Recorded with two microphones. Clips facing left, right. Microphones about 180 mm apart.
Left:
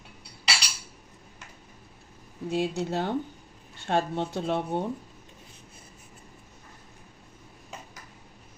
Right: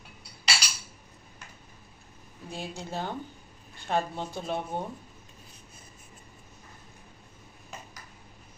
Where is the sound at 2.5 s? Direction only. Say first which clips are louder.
Left 9 dB; 70° left (ahead or behind).